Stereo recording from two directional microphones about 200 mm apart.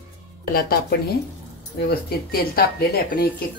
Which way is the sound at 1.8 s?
50° left (ahead or behind).